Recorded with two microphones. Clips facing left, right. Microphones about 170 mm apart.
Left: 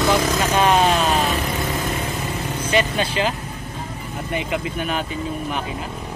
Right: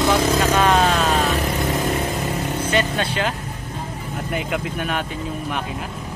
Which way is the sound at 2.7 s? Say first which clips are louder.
Left 3 dB; 10° left (ahead or behind).